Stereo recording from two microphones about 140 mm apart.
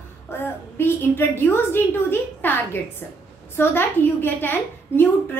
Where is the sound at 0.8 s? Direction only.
15° left (ahead or behind).